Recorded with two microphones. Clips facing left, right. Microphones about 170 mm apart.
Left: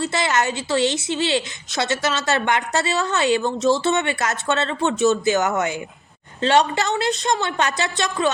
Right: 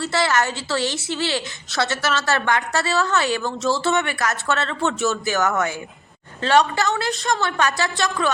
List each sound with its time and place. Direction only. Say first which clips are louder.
0.0 s a woman's voice: even; 20° left (ahead or behind)